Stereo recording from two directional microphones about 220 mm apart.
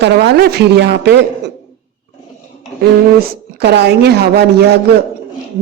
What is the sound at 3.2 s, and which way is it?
A woman's voice, 50° right (ahead or behind).